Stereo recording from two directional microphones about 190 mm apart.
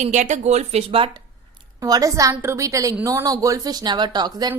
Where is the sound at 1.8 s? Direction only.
20° right (ahead or behind).